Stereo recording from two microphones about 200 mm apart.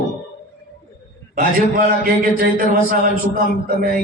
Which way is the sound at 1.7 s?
40° right (ahead or behind).